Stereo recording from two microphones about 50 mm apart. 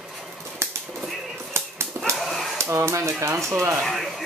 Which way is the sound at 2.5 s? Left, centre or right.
Right.